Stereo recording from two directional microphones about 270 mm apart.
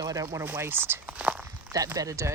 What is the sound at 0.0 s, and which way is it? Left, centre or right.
Speech, centre.